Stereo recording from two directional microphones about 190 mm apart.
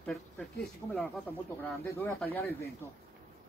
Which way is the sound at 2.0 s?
10° left (ahead or behind).